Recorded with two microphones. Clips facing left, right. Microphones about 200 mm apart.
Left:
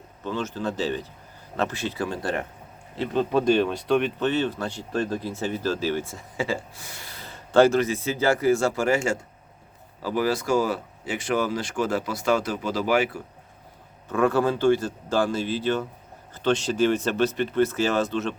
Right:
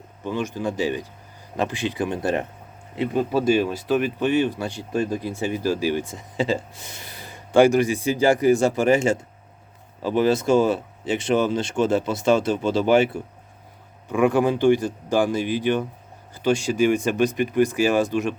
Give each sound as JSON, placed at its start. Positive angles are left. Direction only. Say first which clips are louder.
{"t": 0.3, "sound": "speech", "louder": "right 2 dB", "side_deg": -15}
{"t": 3.0, "sound": "speech", "louder": "right 1 dB", "side_deg": -10}
{"t": 14.1, "sound": "speech", "louder": "right 3 dB", "side_deg": -15}